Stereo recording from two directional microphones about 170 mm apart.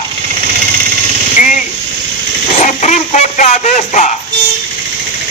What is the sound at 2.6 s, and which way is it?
A man's voice, 45° left (ahead or behind).